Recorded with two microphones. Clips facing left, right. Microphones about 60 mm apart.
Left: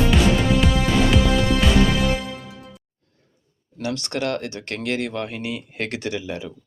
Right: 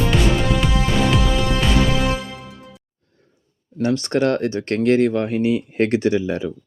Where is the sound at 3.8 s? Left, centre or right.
Right.